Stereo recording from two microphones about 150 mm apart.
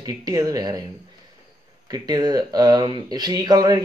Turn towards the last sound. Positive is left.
turn(degrees=-25)  # may be behind; listen again after turning